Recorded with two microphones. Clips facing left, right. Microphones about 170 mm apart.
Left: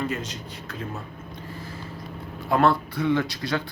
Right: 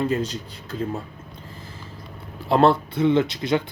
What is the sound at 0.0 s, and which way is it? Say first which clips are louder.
Speech: right 6 dB; 30° right (ahead or behind).